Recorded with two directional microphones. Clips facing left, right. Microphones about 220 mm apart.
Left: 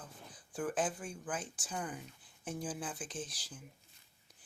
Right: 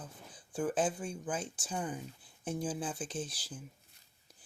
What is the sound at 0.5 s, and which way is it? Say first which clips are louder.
Speech: right 4 dB; 25° right (ahead or behind).